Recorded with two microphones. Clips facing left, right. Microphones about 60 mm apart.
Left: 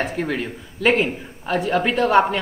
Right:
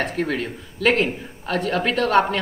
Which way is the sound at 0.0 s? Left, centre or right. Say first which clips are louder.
Even; centre.